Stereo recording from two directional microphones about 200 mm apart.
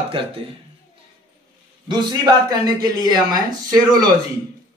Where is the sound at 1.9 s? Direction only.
20° right (ahead or behind).